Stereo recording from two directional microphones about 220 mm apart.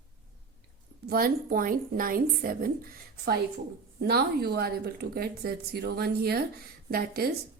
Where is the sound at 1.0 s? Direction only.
40° right (ahead or behind).